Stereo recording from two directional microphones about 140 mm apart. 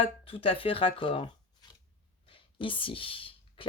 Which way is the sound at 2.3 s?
35° left (ahead or behind).